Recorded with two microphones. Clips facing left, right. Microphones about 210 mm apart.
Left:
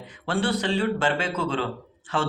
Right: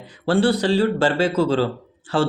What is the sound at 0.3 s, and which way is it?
Speech, 35° right (ahead or behind).